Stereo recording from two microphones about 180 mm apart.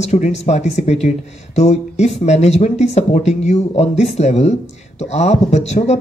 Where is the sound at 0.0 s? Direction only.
40° left (ahead or behind).